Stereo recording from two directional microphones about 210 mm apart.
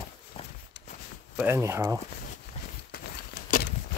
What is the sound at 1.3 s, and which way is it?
Speech, 10° right (ahead or behind).